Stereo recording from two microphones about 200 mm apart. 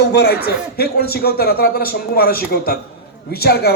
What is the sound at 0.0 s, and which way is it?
A man's voice, 55° left (ahead or behind).